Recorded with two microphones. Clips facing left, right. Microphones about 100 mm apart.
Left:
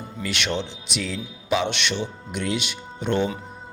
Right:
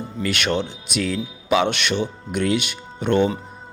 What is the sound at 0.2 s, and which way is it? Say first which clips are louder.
A man's voice: right 4 dB; 50° right (ahead or behind).